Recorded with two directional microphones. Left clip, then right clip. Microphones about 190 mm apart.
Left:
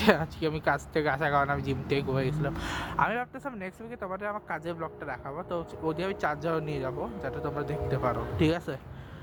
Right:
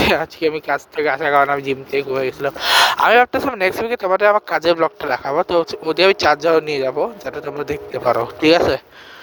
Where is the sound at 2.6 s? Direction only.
55° right (ahead or behind).